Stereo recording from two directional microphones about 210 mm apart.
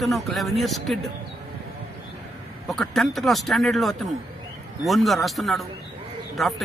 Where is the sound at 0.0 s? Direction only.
Centre (ahead or behind).